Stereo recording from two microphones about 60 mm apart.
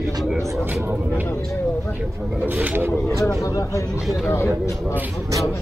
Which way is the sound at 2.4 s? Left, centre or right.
Right.